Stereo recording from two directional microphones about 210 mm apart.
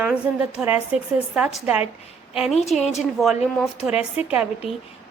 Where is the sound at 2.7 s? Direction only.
Centre (ahead or behind).